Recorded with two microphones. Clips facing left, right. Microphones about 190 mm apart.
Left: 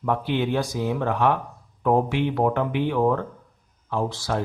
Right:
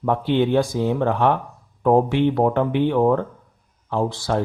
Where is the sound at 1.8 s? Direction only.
40° right (ahead or behind).